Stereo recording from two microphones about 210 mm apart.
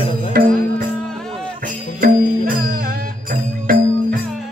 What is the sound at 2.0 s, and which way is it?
Music, 45° right (ahead or behind).